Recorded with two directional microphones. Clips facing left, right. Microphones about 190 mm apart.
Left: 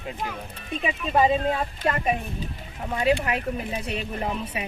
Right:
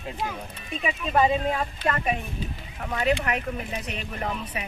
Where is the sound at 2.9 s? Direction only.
30° left (ahead or behind).